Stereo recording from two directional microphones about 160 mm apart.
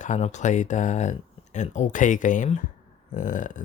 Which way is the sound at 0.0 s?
50° left (ahead or behind).